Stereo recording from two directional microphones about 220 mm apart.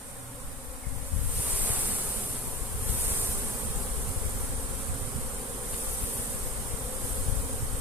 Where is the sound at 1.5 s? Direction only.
5° right (ahead or behind).